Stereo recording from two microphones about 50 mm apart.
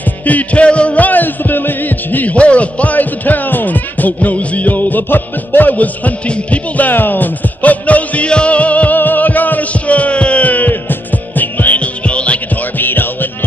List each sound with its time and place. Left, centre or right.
0.2 s music: left
2.3 s music: left
6.9 s music: left
12.7 s music: left